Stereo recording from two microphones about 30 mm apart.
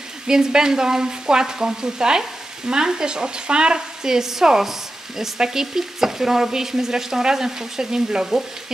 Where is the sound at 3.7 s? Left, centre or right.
Centre.